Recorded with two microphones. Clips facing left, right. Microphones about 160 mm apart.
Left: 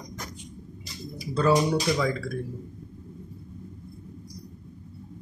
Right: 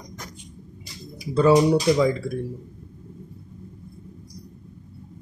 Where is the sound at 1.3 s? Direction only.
20° right (ahead or behind).